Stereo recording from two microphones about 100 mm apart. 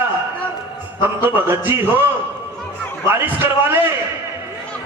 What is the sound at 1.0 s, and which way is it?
Speech, 20° right (ahead or behind).